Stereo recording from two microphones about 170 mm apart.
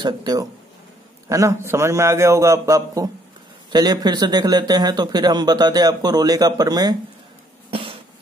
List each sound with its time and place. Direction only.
0.0 s a man's voice: 25° right (ahead or behind)
7.7 s cough: 30° right (ahead or behind)